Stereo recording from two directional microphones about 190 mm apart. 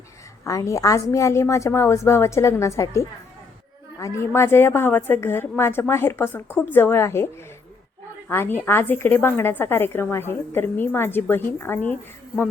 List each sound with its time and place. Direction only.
0.4 s a woman's voice: 15° left (ahead or behind)
8.3 s a woman's voice: 10° left (ahead or behind)